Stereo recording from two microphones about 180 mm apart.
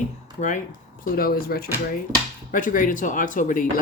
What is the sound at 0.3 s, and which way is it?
Speech, 45° left (ahead or behind).